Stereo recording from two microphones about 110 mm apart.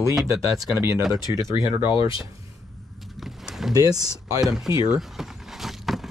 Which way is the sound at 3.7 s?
35° right (ahead or behind).